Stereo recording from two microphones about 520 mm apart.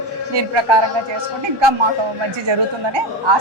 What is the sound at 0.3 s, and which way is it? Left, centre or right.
Speech, right.